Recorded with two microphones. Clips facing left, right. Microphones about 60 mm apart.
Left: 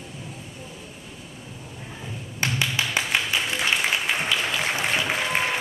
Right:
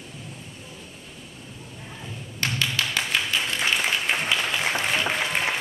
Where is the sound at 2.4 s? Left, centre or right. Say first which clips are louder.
Left 1 dB; centre.